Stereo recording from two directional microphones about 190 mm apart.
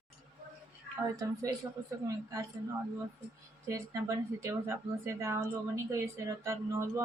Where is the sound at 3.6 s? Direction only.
15° right (ahead or behind).